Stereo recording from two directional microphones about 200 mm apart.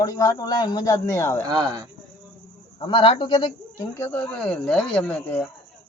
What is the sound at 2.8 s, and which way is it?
Speech, 25° left (ahead or behind).